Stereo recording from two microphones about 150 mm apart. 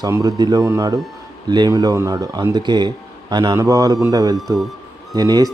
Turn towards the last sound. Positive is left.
turn(degrees=-25)  # may be behind; listen again after turning